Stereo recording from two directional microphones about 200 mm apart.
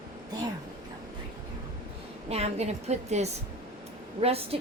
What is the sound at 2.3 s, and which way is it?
A woman's voice, 30° right (ahead or behind).